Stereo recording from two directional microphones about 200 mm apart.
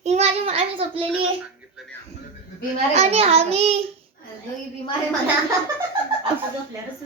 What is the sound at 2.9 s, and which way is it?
Child singing, 30° right (ahead or behind).